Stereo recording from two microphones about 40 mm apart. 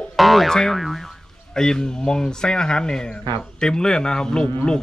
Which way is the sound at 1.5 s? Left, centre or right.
Centre.